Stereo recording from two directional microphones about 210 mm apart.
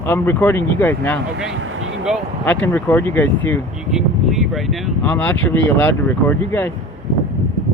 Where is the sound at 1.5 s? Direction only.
65° right (ahead or behind).